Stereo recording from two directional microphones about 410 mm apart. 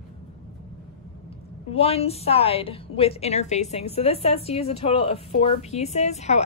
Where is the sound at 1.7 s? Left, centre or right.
Centre.